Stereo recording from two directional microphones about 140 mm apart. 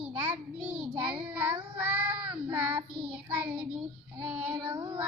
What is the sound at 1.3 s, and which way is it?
Child singing, 15° right (ahead or behind).